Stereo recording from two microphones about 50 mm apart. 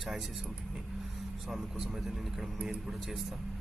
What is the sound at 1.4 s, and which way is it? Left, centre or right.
Speech, centre.